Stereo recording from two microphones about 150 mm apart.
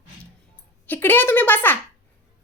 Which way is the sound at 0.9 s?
15° left (ahead or behind).